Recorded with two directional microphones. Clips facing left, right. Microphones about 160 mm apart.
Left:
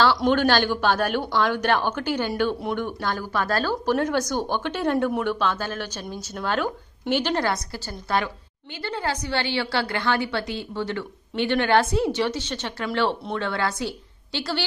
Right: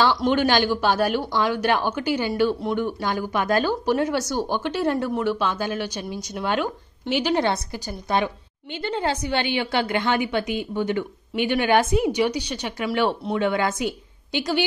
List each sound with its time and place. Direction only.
0.3 s a woman's voice: 10° right (ahead or behind)
7.4 s a woman's voice: 20° right (ahead or behind)